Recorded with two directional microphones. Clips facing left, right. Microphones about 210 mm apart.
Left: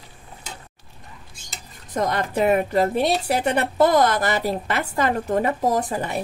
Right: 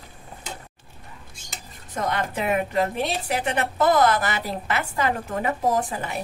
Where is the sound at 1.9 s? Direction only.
40° left (ahead or behind).